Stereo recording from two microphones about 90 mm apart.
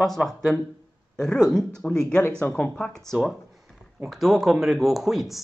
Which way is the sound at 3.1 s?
Centre (ahead or behind).